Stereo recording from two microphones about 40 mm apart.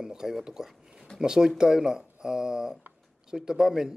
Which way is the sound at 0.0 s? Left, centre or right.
Centre.